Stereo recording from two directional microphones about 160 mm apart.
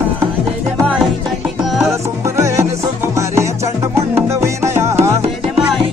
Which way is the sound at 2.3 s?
15° right (ahead or behind).